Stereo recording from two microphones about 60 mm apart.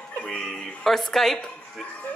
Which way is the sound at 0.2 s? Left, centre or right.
Centre.